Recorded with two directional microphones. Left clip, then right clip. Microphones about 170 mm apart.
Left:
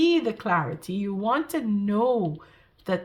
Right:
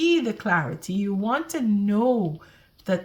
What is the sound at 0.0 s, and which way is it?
A woman's voice, 30° left (ahead or behind).